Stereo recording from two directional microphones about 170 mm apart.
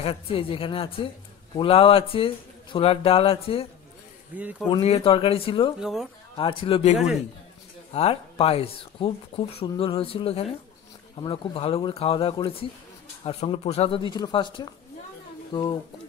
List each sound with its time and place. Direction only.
0.0 s speech: 35° left (ahead or behind)
4.4 s speech: 10° right (ahead or behind)
4.6 s speech: 35° left (ahead or behind)
5.8 s speech: 5° right (ahead or behind)
6.3 s speech: 30° left (ahead or behind)